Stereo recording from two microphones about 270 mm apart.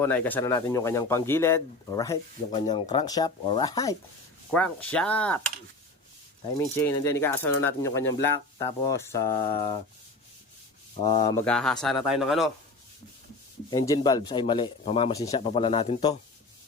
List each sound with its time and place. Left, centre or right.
0.0 s speech: centre
2.5 s speech: left; by 5.4 s centre
6.6 s speech: centre
11.0 s speech: centre
11.4 s speech: centre
13.7 s speech: centre